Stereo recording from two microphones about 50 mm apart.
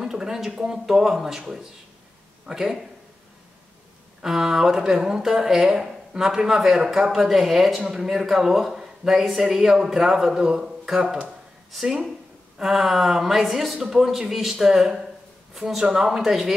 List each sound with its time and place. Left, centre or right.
0.0 s speech: centre
4.2 s speech: centre
11.2 s a sound: centre
12.5 s speech: centre